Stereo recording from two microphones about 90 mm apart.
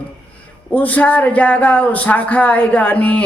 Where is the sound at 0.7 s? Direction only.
15° left (ahead or behind).